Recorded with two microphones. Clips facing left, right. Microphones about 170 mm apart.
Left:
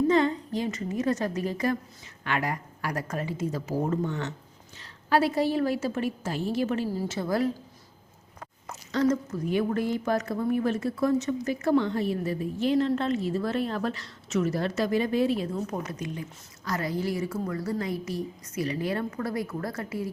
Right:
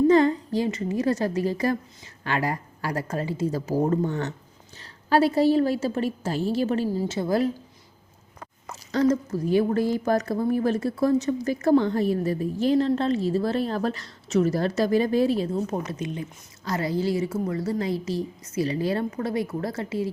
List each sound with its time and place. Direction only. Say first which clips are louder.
0.1 s speech: right 5 dB; 40° right (ahead or behind)
4.8 s speech: right 3 dB; 30° right (ahead or behind)
8.9 s a woman's voice: right 3 dB; 35° right (ahead or behind)